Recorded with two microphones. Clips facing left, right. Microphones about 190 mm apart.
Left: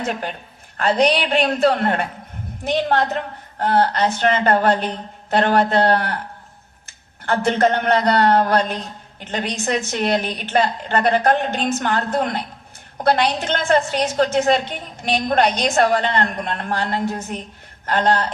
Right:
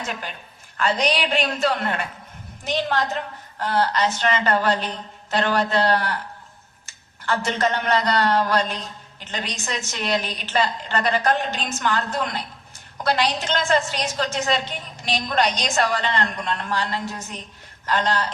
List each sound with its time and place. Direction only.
0.0 s a man's voice: 55° left (ahead or behind)
7.4 s a man's voice: 55° left (ahead or behind)